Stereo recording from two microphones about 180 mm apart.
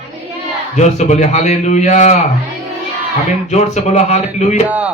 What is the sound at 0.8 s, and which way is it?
Speech, 40° left (ahead or behind).